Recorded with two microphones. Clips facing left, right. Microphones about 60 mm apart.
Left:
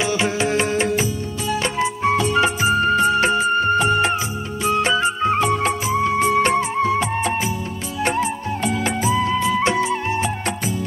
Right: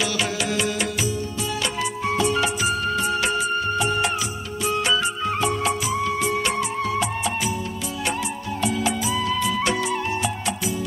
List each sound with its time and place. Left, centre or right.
0.0 s music: left
2.4 s music of bollywood: left
8.0 s music: left